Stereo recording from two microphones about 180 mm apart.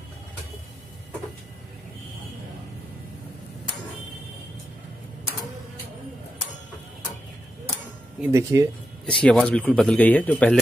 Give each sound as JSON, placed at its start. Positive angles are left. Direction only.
{"t": 8.2, "sound": "speech", "side_deg": -15}
{"t": 9.0, "sound": "speech", "side_deg": 5}